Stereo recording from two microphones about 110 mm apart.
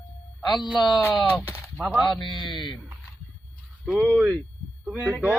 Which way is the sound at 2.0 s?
40° left (ahead or behind).